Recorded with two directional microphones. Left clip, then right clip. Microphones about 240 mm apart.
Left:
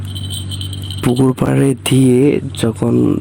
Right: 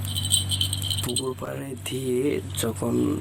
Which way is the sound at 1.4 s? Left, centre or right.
Left.